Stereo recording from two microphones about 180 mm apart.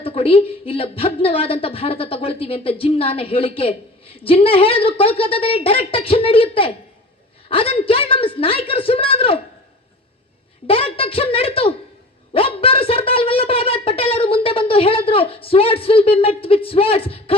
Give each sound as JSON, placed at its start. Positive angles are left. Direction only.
{"t": 0.0, "sound": "a woman's voice", "side_deg": 30}
{"t": 10.7, "sound": "a woman's voice", "side_deg": 30}
{"t": 12.3, "sound": "a sound", "side_deg": 30}